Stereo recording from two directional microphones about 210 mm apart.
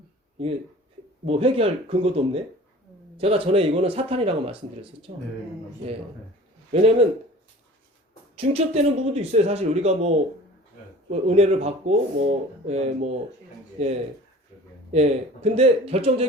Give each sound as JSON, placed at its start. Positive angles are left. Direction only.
{"t": 1.2, "sound": "speech", "side_deg": -25}
{"t": 6.7, "sound": "speech", "side_deg": -25}
{"t": 8.4, "sound": "speech", "side_deg": -30}